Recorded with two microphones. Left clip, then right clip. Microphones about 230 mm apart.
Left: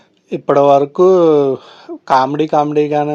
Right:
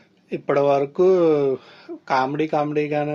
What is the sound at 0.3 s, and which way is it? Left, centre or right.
Speech, left.